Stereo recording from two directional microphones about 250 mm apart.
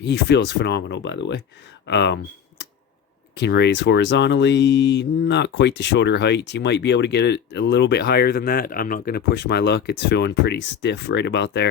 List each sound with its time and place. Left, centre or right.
0.0 s speech: left
3.3 s speech: left